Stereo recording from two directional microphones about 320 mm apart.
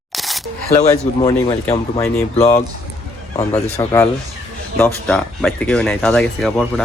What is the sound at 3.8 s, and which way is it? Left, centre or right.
A man's voice, centre.